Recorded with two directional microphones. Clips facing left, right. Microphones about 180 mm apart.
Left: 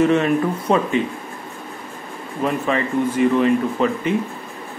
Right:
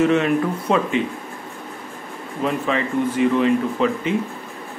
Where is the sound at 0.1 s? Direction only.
40° left (ahead or behind).